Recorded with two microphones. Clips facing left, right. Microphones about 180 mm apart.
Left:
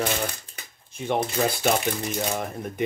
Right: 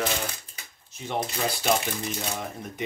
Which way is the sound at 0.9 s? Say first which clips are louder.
Left 5 dB; 55° left (ahead or behind).